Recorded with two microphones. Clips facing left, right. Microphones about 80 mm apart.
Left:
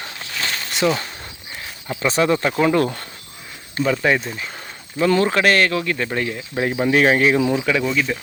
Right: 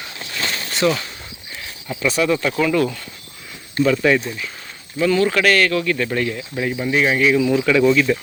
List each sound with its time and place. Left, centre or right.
0.8 s speech: centre
1.9 s speech: left
3.8 s speech: centre
4.9 s speech: left; by 6.4 s centre
6.5 s speech: left
6.8 s speech: left
7.6 s speech: centre